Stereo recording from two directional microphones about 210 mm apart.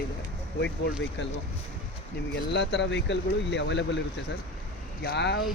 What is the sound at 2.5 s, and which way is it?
Speech, 55° left (ahead or behind).